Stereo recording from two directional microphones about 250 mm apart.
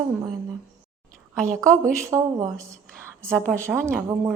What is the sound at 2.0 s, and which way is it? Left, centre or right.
Speech, centre.